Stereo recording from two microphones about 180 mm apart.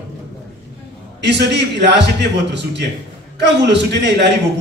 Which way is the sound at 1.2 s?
70° right (ahead or behind).